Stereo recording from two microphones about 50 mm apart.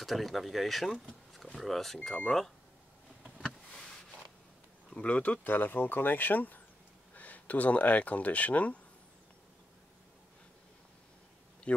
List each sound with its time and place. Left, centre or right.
0.0 s speech: centre
1.0 s a sound: centre
2.2 s speech: centre
4.9 s speech: left
11.7 s speech: left